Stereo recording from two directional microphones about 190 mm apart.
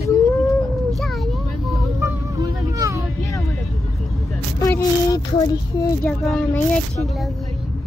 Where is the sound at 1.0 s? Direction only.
Centre (ahead or behind).